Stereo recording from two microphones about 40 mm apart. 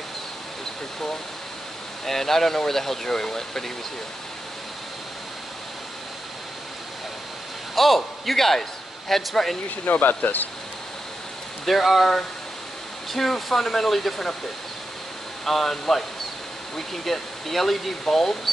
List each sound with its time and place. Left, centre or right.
2.0 s speech: centre
7.7 s a man's voice: centre
9.8 s speech: left
11.6 s speech: centre
15.4 s speech: centre